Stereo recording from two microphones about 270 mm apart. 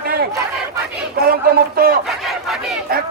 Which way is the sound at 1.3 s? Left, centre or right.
Right.